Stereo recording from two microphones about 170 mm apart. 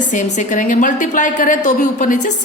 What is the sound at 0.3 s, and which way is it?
A woman's voice, 50° left (ahead or behind).